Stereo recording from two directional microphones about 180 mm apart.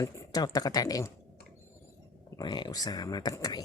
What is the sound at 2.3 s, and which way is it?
Speech, 25° left (ahead or behind).